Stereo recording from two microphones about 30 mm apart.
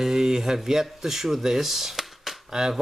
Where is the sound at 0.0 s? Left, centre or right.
Centre.